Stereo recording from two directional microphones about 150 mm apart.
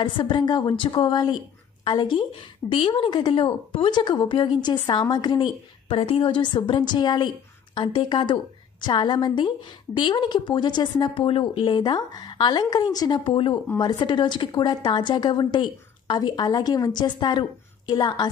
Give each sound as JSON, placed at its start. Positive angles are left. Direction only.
{"t": 0.0, "sound": "a woman's voice", "side_deg": 30}